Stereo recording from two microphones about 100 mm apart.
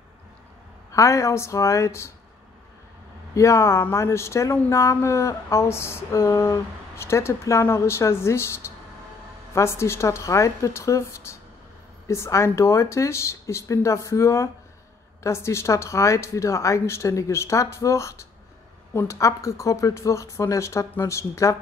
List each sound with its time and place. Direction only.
0.9 s speech: 30° left (ahead or behind)
3.3 s speech: 30° left (ahead or behind)